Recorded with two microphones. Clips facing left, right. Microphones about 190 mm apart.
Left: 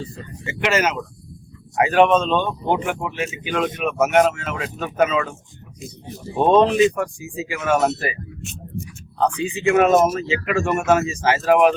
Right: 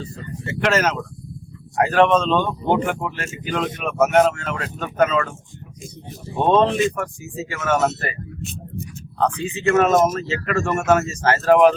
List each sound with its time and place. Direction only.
0.4 s speech: 5° left (ahead or behind)
6.4 s speech: 10° left (ahead or behind)
8.4 s a sound: 35° right (ahead or behind)
9.6 s speech: 10° left (ahead or behind)